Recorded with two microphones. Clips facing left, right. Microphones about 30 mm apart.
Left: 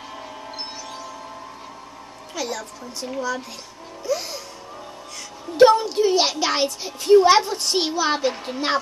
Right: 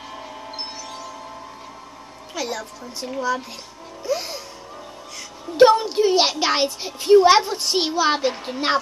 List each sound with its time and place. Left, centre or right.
2.3 s a woman's voice: centre
4.0 s music: centre
5.6 s a woman's voice: centre